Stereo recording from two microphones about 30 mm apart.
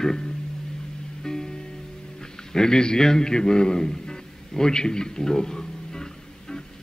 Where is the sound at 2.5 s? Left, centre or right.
Left.